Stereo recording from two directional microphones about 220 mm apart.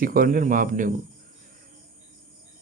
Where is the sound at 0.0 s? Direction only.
40° right (ahead or behind).